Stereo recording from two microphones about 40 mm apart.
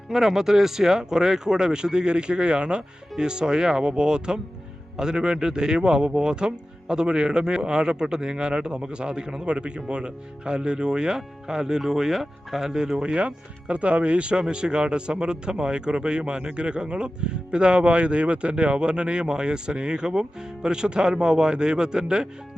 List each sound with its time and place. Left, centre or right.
0.1 s speech: centre
13.0 s speech: right